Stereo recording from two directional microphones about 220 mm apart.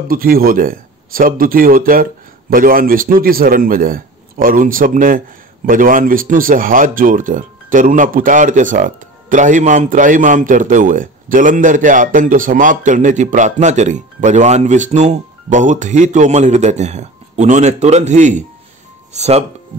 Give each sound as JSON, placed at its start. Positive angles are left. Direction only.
{"t": 0.1, "sound": "speech", "side_deg": -40}